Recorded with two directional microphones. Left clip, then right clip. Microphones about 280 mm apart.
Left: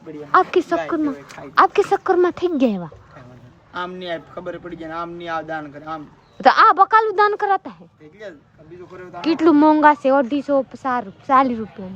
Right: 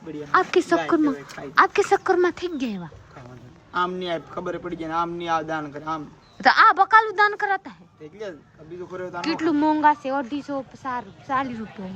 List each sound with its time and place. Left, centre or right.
0.3 s speech: centre
3.8 s a woman's voice: centre
9.2 s speech: centre